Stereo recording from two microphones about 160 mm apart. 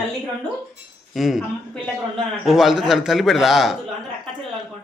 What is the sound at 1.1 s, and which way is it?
A man's voice, centre (ahead or behind).